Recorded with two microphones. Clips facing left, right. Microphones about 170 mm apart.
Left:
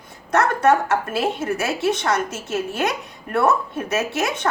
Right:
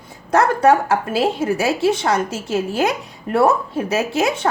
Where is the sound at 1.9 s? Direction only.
30° right (ahead or behind).